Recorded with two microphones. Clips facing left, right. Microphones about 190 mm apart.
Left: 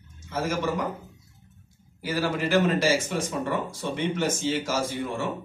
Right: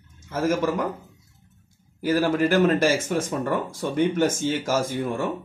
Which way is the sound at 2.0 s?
50° right (ahead or behind).